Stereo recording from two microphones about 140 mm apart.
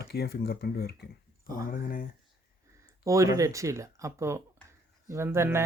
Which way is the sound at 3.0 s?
20° right (ahead or behind).